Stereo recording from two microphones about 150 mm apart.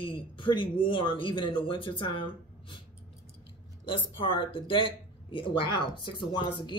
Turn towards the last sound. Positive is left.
turn(degrees=30)  # may be behind; listen again after turning